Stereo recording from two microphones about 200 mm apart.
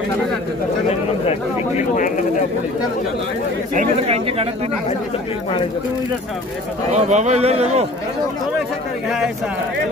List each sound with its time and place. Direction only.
1.8 s a sound: 40° left (ahead or behind)
3.7 s speech: 35° right (ahead or behind)
6.9 s speech: 35° right (ahead or behind)